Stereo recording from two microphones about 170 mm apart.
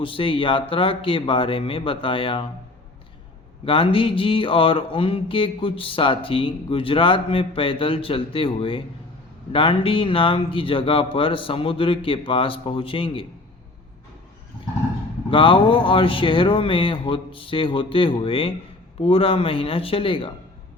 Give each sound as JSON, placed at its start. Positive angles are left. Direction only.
{"t": 0.0, "sound": "mantra", "side_deg": 30}
{"t": 3.7, "sound": "mantra", "side_deg": 30}
{"t": 15.3, "sound": "mantra", "side_deg": 30}